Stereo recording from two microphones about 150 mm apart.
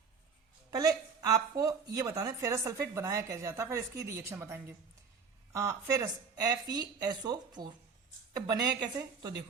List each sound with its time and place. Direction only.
0.7 s a woman's voice: 25° right (ahead or behind)